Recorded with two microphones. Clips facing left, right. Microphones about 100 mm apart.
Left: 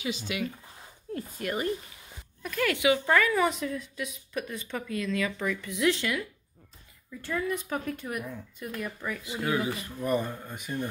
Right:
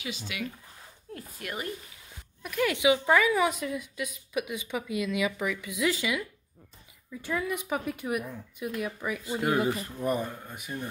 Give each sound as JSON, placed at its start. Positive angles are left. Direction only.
{"t": 0.0, "sound": "speech", "side_deg": 0}
{"t": 2.4, "sound": "a woman's voice", "side_deg": -15}
{"t": 10.4, "sound": "a woman's voice", "side_deg": -10}